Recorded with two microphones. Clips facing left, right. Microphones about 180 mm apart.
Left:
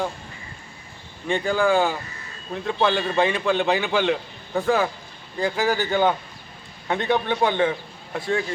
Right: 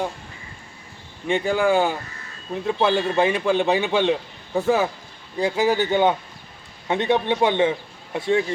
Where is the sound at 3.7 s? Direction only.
25° right (ahead or behind).